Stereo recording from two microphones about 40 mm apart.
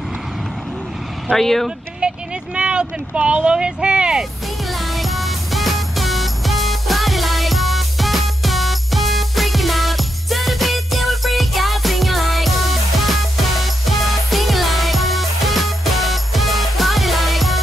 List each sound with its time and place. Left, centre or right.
1.3 s speech: centre
2.0 s speech: right
4.9 s music: centre